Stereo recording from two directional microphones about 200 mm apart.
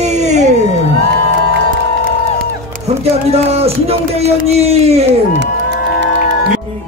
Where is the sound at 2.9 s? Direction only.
30° right (ahead or behind).